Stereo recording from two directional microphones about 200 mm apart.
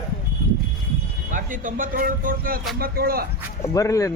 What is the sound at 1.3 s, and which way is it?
Speech, 40° right (ahead or behind).